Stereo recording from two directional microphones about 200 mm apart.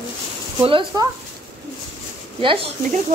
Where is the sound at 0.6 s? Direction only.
25° right (ahead or behind).